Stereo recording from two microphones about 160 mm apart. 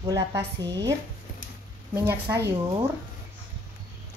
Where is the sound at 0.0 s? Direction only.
20° right (ahead or behind).